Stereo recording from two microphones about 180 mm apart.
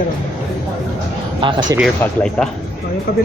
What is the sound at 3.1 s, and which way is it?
Speech, 60° left (ahead or behind).